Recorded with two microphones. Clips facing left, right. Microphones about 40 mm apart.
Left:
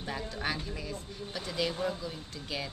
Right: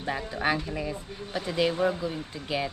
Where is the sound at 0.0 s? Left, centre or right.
Right.